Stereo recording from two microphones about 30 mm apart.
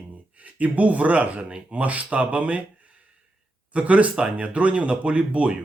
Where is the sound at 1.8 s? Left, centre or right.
Right.